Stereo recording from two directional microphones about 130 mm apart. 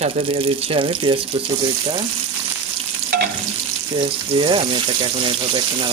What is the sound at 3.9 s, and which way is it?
Speech, 40° right (ahead or behind).